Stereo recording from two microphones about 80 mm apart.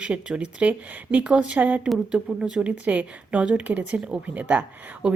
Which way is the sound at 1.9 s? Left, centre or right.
Centre.